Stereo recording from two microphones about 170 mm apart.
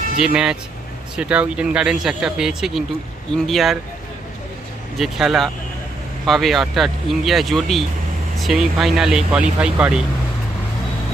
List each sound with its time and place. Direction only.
0.2 s speech: 5° right (ahead or behind)
4.9 s speech: centre (ahead or behind)